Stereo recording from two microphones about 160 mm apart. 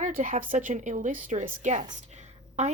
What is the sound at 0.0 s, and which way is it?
A woman's voice, 50° right (ahead or behind).